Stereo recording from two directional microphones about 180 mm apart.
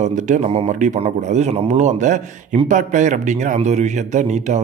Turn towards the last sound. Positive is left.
turn(degrees=-40)  # may be behind; listen again after turning